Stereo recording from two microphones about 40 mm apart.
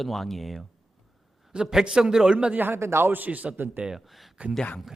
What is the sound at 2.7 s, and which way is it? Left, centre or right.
Speech, right.